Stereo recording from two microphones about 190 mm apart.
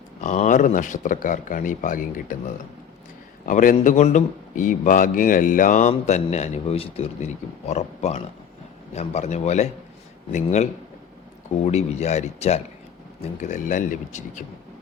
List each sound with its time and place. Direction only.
0.2 s speech: 40° left (ahead or behind)
3.4 s speech: 45° left (ahead or behind)